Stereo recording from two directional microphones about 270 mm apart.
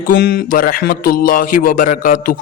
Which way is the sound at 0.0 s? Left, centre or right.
Left.